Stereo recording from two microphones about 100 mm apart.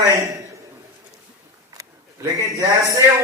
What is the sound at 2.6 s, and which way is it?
Speech, 35° right (ahead or behind).